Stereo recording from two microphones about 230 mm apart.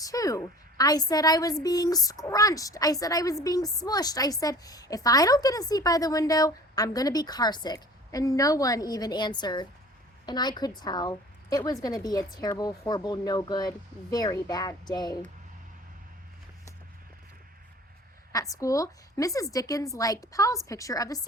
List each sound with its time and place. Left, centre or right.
0.0 s a woman's voice: centre
18.3 s a woman's voice: centre